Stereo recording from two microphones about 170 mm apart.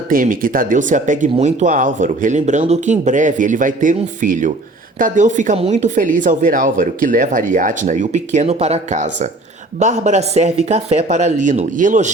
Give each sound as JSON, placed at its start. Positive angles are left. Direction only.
{"t": 0.1, "sound": "speech", "side_deg": -55}